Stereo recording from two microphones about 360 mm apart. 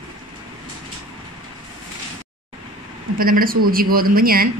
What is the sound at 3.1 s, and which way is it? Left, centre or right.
Speech, right.